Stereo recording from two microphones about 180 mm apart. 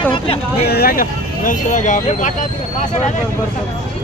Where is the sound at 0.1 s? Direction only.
30° left (ahead or behind).